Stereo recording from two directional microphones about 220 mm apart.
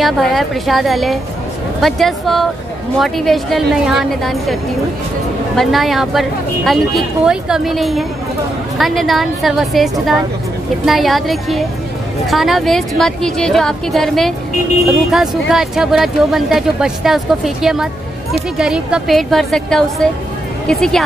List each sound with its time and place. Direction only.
0.0 s speech: centre (ahead or behind)
5.6 s speech: centre (ahead or behind)